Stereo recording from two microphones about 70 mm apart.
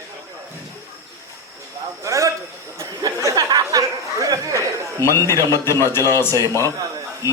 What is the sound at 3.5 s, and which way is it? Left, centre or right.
Chatter, right.